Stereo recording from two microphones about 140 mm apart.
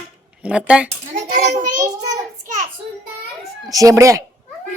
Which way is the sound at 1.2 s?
65° right (ahead or behind).